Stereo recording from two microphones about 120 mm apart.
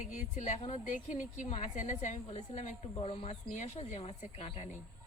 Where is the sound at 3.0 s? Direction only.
55° left (ahead or behind).